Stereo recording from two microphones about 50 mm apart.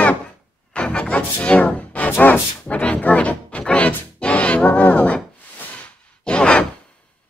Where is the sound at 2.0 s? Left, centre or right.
Left.